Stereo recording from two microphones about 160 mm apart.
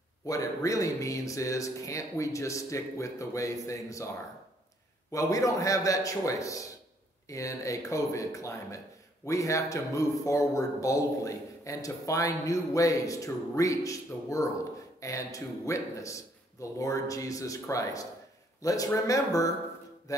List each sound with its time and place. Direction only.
0.3 s a man's voice: 20° left (ahead or behind)
5.1 s a man's voice: 20° left (ahead or behind)
20.1 s music: 20° left (ahead or behind)